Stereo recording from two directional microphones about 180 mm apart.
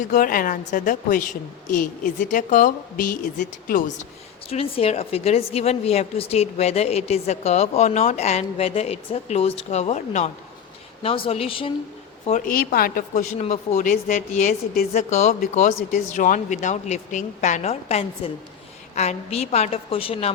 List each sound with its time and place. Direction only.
0.1 s a woman's voice: 50° left (ahead or behind)
4.4 s a woman's voice: 30° left (ahead or behind)
12.2 s a woman's voice: 45° left (ahead or behind)
13.4 s a woman's voice: 40° left (ahead or behind)